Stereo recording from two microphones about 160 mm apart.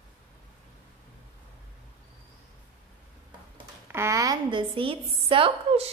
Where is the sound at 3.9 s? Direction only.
20° right (ahead or behind).